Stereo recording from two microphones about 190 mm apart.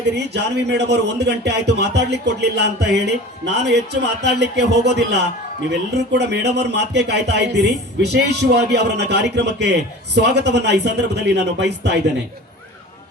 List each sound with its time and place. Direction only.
0.0 s speech: 65° right (ahead or behind)